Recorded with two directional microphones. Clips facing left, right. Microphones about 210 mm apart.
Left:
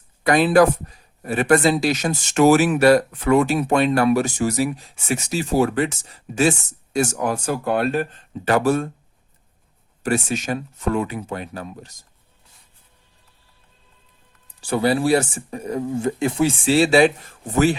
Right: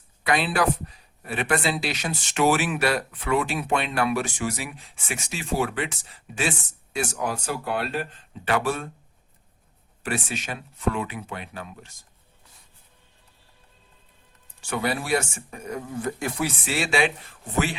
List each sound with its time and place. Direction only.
0.3 s speech: 45° left (ahead or behind)
10.0 s speech: 40° left (ahead or behind)
14.6 s speech: 35° left (ahead or behind)